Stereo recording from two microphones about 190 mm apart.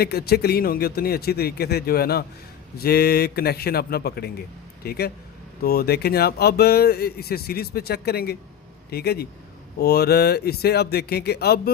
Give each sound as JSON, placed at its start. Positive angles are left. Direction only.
{"t": 0.0, "sound": "speech", "side_deg": 55}